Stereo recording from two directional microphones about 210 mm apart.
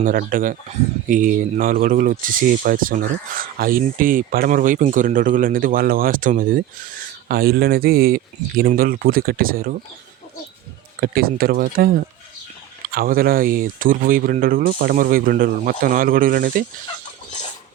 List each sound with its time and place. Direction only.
0.0 s speech: 40° right (ahead or behind)
11.0 s speech: 45° right (ahead or behind)